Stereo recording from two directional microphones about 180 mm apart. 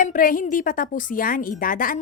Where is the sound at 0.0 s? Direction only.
50° left (ahead or behind).